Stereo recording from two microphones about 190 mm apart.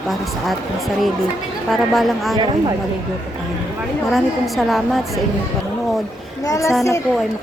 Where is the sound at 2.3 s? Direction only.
20° right (ahead or behind).